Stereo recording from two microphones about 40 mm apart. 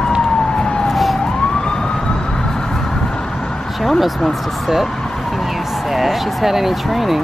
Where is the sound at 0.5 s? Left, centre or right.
Left.